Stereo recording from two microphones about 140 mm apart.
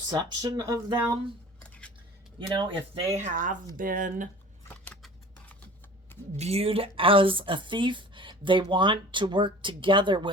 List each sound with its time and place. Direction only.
0.1 s speech: 30° right (ahead or behind)
2.5 s speech: 35° right (ahead or behind)
3.2 s speech: 60° right (ahead or behind)
3.8 s speech: 80° right
6.3 s speech: 50° right (ahead or behind)